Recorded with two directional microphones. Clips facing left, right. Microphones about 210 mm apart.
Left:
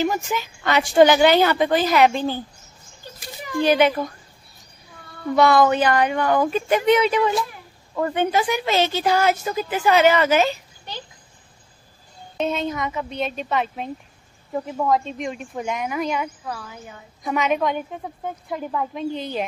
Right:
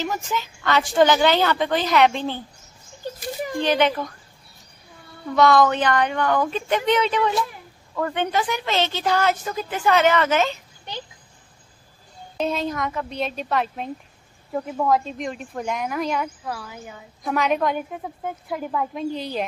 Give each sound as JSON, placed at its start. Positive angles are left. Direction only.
{"t": 0.0, "sound": "a woman's voice", "side_deg": 10}
{"t": 3.6, "sound": "a woman's voice", "side_deg": 10}
{"t": 5.3, "sound": "a woman's voice", "side_deg": 10}
{"t": 12.4, "sound": "a woman's voice", "side_deg": 0}